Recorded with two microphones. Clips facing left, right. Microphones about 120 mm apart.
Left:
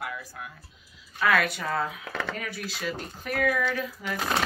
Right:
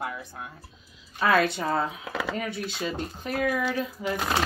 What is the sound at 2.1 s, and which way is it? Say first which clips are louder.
Speech: right 2 dB; 10° right (ahead or behind).